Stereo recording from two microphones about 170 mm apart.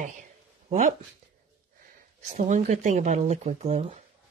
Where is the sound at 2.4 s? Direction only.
45° right (ahead or behind).